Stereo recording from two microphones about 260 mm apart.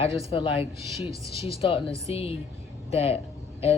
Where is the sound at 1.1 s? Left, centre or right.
Centre.